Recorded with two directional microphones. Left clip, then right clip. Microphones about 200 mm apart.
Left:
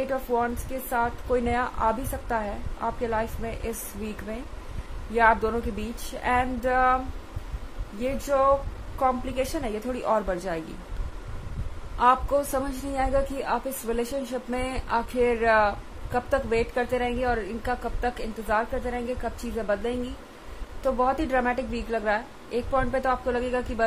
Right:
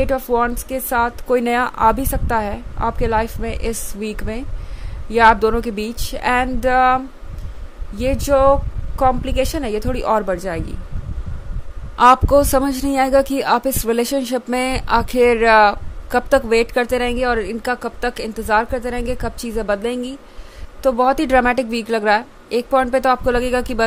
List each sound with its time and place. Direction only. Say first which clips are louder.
0.1 s speech: right 8 dB; 50° right (ahead or behind)
8.0 s speech: right 9 dB; 55° right (ahead or behind)
12.0 s speech: right 10 dB; 50° right (ahead or behind)